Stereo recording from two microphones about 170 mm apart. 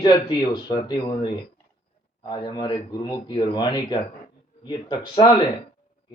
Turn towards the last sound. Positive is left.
turn(degrees=25)  # may be behind; listen again after turning